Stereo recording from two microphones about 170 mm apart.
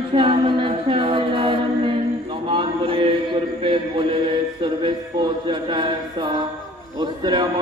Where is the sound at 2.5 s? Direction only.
30° right (ahead or behind).